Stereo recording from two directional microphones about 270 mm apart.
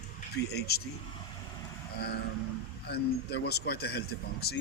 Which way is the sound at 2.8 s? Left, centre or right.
Left.